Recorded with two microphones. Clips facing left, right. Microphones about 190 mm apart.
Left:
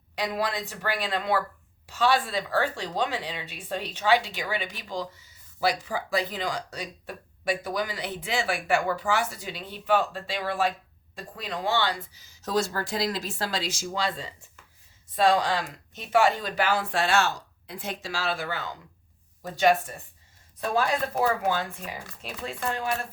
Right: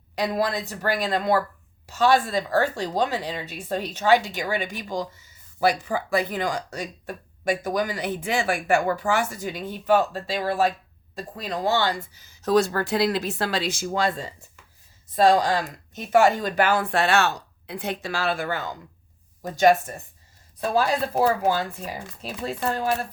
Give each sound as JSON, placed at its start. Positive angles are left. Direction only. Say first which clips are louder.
{"t": 0.2, "sound": "speech", "louder": "right 4 dB", "side_deg": -40}
{"t": 20.6, "sound": "speech", "louder": "right 3 dB", "side_deg": -35}